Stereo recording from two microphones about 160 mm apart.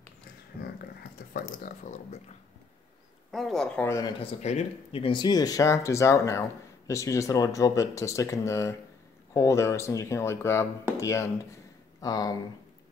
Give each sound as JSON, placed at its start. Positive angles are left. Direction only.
{"t": 0.6, "sound": "a sound", "side_deg": 75}
{"t": 1.3, "sound": "speech", "side_deg": 60}
{"t": 3.3, "sound": "speech", "side_deg": 0}
{"t": 3.8, "sound": "speech", "side_deg": 20}
{"t": 4.2, "sound": "speech", "side_deg": 45}